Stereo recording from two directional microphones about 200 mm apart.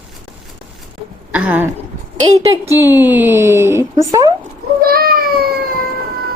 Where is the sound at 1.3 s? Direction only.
10° right (ahead or behind).